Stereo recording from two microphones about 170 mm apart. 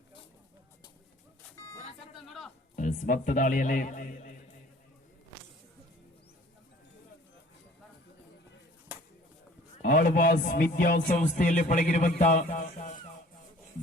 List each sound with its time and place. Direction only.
1.5 s vehicle: 15° left (ahead or behind)
2.7 s a man's voice: 50° left (ahead or behind)
9.8 s music: 55° left (ahead or behind)